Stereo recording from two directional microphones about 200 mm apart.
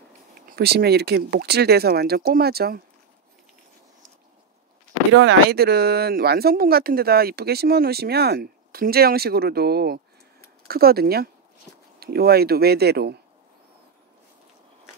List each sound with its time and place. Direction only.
0.5 s speech: 50° right (ahead or behind)
5.2 s speech: 50° right (ahead or behind)